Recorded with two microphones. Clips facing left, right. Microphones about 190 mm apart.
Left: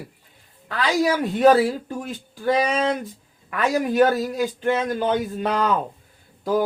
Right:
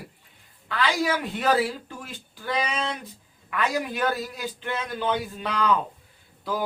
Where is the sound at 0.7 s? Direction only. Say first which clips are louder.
Left 4 dB; 45° left (ahead or behind).